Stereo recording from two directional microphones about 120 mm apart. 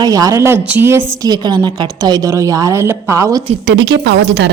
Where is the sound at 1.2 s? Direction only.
35° right (ahead or behind).